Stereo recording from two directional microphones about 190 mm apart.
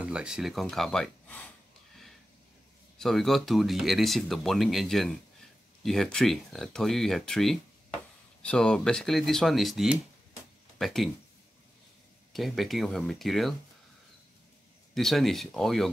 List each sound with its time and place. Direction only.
0.0 s speech: 5° right (ahead or behind)
3.0 s speech: centre (ahead or behind)
12.3 s speech: centre (ahead or behind)
15.0 s speech: centre (ahead or behind)